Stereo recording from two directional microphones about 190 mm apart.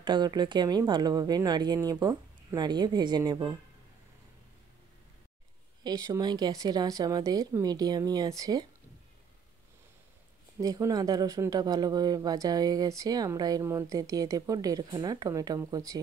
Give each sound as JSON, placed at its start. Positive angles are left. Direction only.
{"t": 0.0, "sound": "speech", "side_deg": -20}
{"t": 5.9, "sound": "speech", "side_deg": -20}
{"t": 10.6, "sound": "speech", "side_deg": -20}